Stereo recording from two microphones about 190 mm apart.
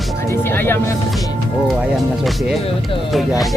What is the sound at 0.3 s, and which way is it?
Speech, 10° left (ahead or behind).